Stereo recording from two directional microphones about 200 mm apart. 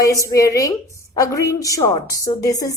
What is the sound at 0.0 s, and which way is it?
A woman's voice, 15° left (ahead or behind).